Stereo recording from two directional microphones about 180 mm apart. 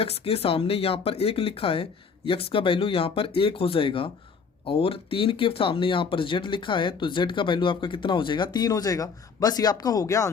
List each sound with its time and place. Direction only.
0.0 s speech: 35° left (ahead or behind)